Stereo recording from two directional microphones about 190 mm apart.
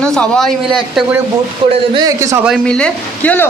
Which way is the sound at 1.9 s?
20° right (ahead or behind).